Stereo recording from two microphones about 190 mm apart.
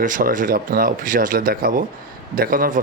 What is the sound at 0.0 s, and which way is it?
A man's voice, 45° right (ahead or behind).